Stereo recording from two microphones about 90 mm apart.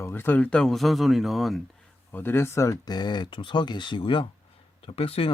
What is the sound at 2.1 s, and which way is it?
Speech, 25° left (ahead or behind).